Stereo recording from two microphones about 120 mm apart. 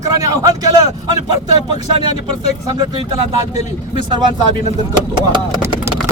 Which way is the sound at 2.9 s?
40° right (ahead or behind).